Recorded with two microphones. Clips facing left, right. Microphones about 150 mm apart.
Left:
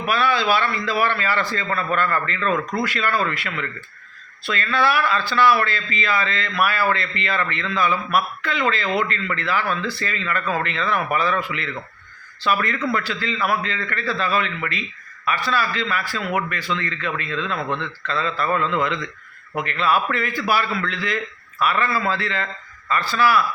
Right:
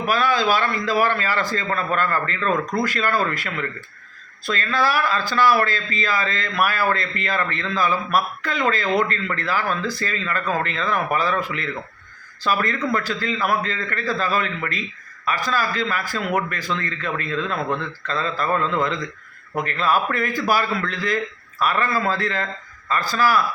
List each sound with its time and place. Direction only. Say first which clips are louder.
0.0 s a man's voice: right 1 dB; 40° right (ahead or behind)